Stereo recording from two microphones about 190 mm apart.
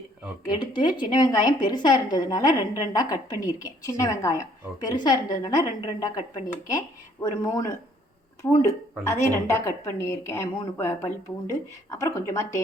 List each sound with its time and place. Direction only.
0.4 s a woman's voice: 20° left (ahead or behind)